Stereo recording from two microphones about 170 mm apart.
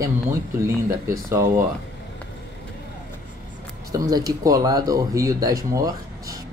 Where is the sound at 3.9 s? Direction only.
20° right (ahead or behind).